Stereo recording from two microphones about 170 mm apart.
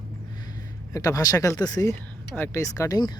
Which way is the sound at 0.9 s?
20° left (ahead or behind).